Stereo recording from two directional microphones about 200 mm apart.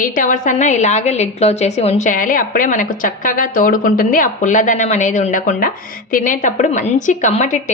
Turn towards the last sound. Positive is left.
turn(degrees=35)  # may be behind; listen again after turning